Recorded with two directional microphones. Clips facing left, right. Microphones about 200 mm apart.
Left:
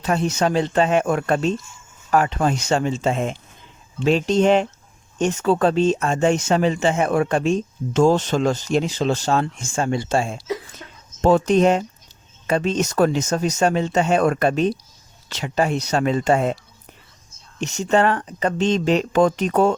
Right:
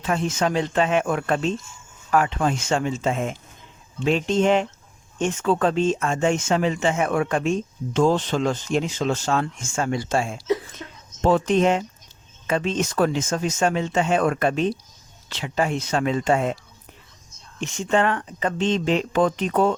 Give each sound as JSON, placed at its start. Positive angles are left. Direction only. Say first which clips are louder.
{"t": 0.0, "sound": "speech", "louder": "left 3 dB", "side_deg": 40}
{"t": 7.9, "sound": "speech", "louder": "left 3 dB", "side_deg": 45}
{"t": 11.2, "sound": "speech", "louder": "left 3 dB", "side_deg": 45}
{"t": 17.6, "sound": "speech", "louder": "left 3 dB", "side_deg": 40}